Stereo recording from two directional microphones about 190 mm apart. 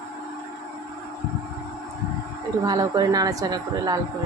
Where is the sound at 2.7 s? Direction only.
20° right (ahead or behind).